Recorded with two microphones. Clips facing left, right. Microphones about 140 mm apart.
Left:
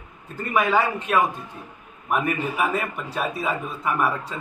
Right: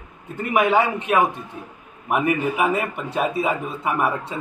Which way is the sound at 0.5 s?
20° right (ahead or behind).